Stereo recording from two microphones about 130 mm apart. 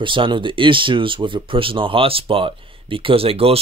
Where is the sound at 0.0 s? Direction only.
40° right (ahead or behind).